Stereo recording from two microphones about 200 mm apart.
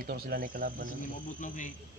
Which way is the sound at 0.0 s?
50° right (ahead or behind).